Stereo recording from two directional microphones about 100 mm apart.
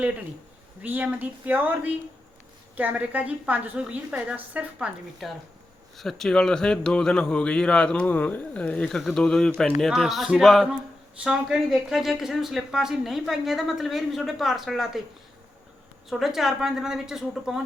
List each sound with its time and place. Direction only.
0.8 s a woman's voice: 15° right (ahead or behind)
6.0 s a man's voice: 5° left (ahead or behind)
16.0 s speech: centre (ahead or behind)